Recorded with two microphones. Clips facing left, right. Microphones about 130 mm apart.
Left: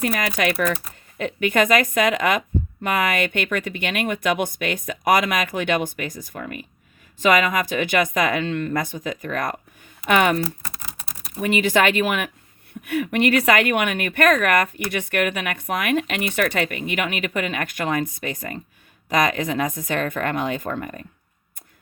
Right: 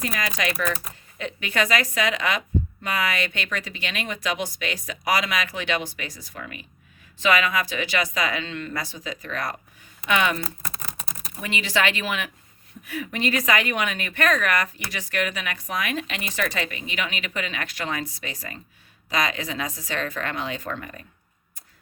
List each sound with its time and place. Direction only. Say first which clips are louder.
0.0 s speech: left 5 dB; 60° left (ahead or behind)
12.8 s speech: left 7 dB; 65° left (ahead or behind); by 21.0 s 45° left (ahead or behind)